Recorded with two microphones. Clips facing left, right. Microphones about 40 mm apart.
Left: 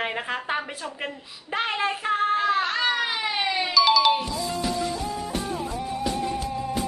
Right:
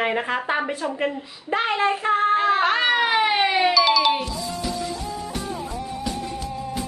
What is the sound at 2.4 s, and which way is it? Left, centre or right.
Cat, right.